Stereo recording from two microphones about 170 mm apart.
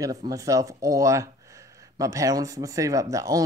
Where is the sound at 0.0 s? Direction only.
20° right (ahead or behind).